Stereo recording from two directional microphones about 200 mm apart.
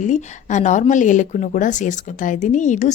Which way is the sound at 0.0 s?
35° left (ahead or behind).